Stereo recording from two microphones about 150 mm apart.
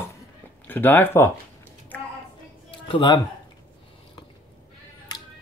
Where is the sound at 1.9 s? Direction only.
10° left (ahead or behind).